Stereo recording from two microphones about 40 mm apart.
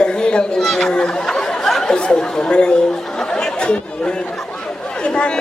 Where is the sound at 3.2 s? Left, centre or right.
Left.